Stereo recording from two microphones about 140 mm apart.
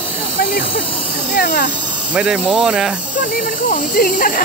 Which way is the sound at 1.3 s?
75° left (ahead or behind).